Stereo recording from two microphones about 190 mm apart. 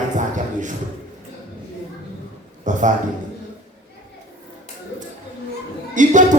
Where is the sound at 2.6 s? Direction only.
40° right (ahead or behind).